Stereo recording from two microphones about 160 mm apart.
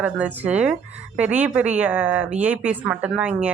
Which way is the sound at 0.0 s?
10° right (ahead or behind).